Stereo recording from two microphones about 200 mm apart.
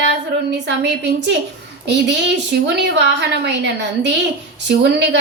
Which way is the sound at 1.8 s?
60° right (ahead or behind).